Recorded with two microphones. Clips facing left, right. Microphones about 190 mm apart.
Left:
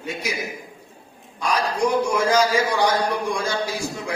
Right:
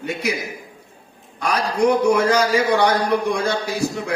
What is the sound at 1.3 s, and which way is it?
A man's voice, 60° right (ahead or behind).